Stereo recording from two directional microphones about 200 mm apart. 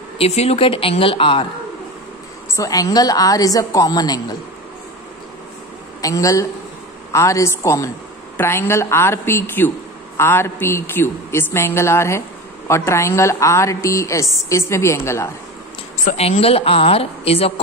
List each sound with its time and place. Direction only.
0.2 s a woman's voice: 30° left (ahead or behind)
2.5 s a woman's voice: 15° left (ahead or behind)
5.9 s a woman's voice: 15° left (ahead or behind)
16.1 s a woman's voice: 30° left (ahead or behind)